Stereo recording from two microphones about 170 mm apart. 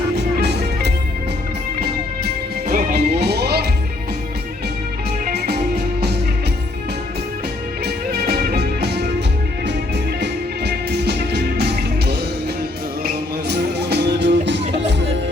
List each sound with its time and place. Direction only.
0.2 s music: 75° right (ahead or behind)
2.6 s music: 70° right (ahead or behind)
5.2 s music: 75° right (ahead or behind)
7.9 s music: 70° right (ahead or behind)
10.2 s music: 75° right (ahead or behind)
13.9 s music: 85° right